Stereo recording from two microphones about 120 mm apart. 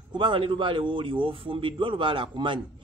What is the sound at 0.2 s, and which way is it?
A man's voice, 45° right (ahead or behind).